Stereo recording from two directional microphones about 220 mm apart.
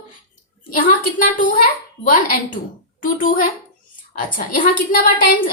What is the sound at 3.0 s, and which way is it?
A woman's voice, 40° left (ahead or behind).